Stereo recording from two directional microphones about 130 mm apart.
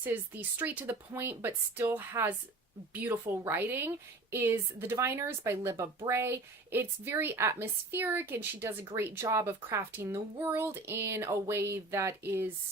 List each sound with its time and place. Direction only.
0.0 s a woman's voice: 15° right (ahead or behind)